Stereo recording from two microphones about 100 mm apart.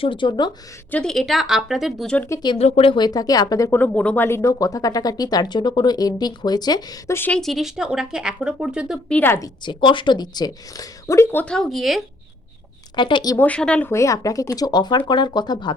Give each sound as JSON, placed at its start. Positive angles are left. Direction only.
{"t": 0.0, "sound": "speech", "side_deg": 55}
{"t": 0.9, "sound": "speech", "side_deg": 15}
{"t": 1.1, "sound": "speech", "side_deg": 0}
{"t": 2.6, "sound": "speech", "side_deg": 85}
{"t": 2.9, "sound": "speech", "side_deg": 40}
{"t": 3.7, "sound": "speech", "side_deg": 20}
{"t": 7.3, "sound": "speech", "side_deg": 5}
{"t": 9.0, "sound": "speech", "side_deg": 10}
{"t": 9.6, "sound": "speech", "side_deg": 50}
{"t": 11.4, "sound": "speech", "side_deg": 5}
{"t": 13.0, "sound": "speech", "side_deg": 50}
{"t": 13.4, "sound": "speech", "side_deg": 10}
{"t": 13.9, "sound": "speech", "side_deg": 30}